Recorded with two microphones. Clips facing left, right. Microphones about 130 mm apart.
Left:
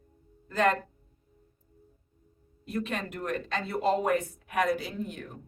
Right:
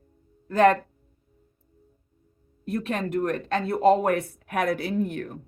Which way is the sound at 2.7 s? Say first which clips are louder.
Right 6 dB; 55° right (ahead or behind).